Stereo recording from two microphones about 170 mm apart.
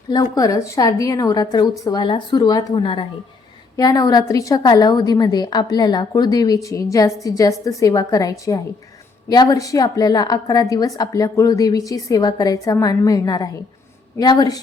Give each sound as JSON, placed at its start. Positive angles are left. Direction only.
{"t": 0.1, "sound": "a woman's voice", "side_deg": 20}